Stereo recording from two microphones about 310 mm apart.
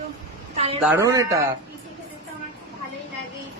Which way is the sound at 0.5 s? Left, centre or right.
Centre.